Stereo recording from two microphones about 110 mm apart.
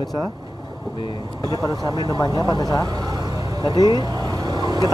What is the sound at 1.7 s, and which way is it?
Speech, 35° right (ahead or behind).